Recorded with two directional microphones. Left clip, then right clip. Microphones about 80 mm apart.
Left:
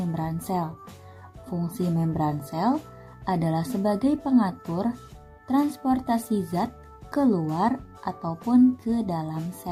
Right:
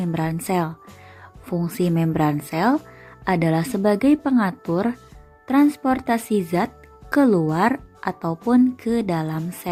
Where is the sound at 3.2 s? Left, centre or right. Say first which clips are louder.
Right 6 dB; right.